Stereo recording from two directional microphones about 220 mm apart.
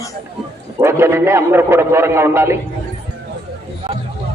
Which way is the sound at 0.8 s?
10° right (ahead or behind).